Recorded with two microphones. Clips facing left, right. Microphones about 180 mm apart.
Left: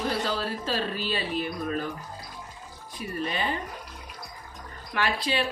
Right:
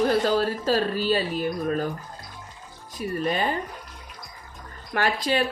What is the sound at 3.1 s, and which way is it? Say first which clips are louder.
Speech: right 5 dB; 45° right (ahead or behind).